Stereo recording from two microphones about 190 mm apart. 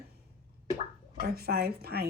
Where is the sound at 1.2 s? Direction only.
55° right (ahead or behind).